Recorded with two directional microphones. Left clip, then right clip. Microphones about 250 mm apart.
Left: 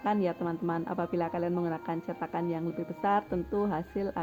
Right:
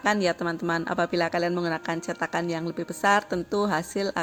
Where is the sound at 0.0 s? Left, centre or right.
Centre.